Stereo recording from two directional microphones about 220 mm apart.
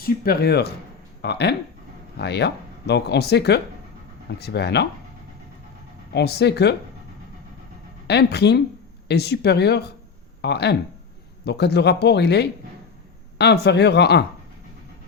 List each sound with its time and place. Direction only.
0.0 s speech: 45° left (ahead or behind)
6.1 s speech: 50° left (ahead or behind)
8.0 s speech: 50° left (ahead or behind)